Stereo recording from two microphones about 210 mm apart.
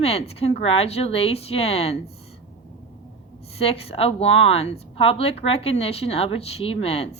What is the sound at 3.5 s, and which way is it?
Speech, 30° left (ahead or behind).